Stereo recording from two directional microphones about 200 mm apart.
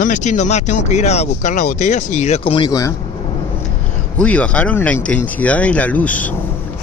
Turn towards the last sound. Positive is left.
turn(degrees=5)  # may be behind; listen again after turning